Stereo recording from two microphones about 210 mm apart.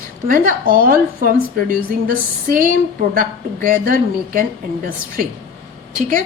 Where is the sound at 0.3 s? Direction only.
40° right (ahead or behind).